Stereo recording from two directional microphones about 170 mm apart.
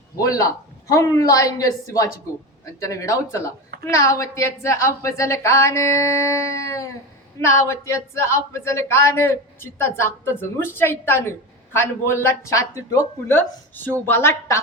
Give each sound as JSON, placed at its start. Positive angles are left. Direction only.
{"t": 0.2, "sound": "a woman's voice", "side_deg": 20}